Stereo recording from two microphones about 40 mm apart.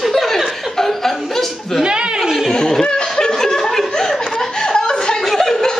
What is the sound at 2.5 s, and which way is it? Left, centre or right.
Speech, centre.